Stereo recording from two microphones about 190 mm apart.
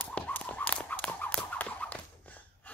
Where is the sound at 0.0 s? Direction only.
10° left (ahead or behind).